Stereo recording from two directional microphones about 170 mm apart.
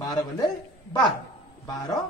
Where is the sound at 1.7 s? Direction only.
20° left (ahead or behind).